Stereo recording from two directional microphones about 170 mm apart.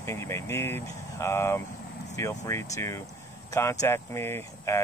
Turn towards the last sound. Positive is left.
turn(degrees=15)  # may be behind; listen again after turning